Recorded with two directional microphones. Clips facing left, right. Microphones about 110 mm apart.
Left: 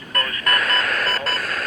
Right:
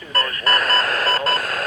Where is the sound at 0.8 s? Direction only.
40° right (ahead or behind).